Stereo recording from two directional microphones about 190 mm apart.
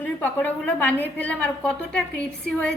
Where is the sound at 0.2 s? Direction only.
10° left (ahead or behind).